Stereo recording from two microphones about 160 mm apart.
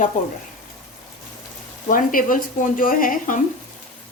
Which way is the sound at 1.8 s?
60° left (ahead or behind).